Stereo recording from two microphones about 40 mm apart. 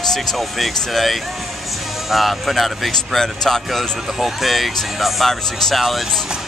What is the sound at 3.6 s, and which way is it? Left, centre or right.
Speech, centre.